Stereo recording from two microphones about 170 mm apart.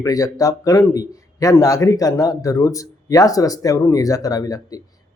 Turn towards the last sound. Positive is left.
turn(degrees=20)  # may be behind; listen again after turning